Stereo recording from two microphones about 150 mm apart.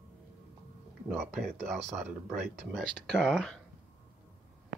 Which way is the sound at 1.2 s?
5° left (ahead or behind).